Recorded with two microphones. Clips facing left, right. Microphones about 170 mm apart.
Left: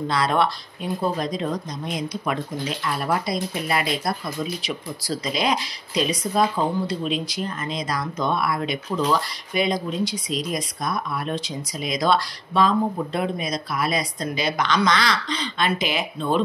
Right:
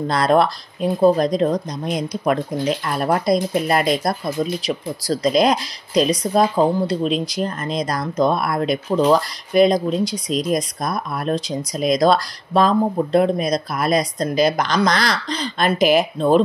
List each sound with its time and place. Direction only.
0.1 s speech: 45° right (ahead or behind)